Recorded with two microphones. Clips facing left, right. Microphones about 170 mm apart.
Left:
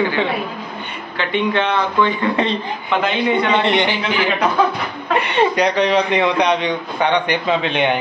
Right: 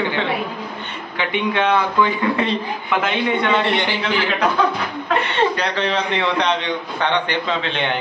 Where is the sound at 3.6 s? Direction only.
20° left (ahead or behind).